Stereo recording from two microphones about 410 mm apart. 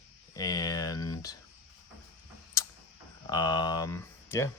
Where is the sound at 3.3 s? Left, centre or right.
Centre.